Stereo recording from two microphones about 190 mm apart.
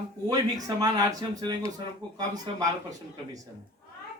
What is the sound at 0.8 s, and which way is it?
Speech, 20° right (ahead or behind).